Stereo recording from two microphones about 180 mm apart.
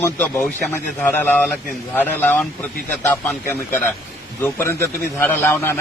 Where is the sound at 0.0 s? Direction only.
15° left (ahead or behind).